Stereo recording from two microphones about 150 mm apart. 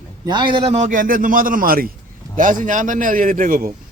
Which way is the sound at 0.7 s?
60° right (ahead or behind).